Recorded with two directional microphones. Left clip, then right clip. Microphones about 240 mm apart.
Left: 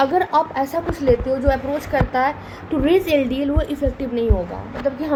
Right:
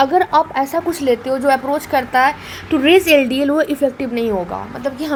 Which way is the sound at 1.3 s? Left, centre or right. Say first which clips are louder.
Right 4 dB; right.